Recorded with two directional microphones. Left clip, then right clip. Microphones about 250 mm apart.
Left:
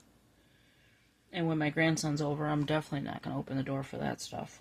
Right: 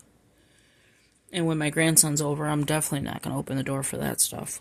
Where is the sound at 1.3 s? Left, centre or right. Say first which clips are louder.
Right 6 dB; right.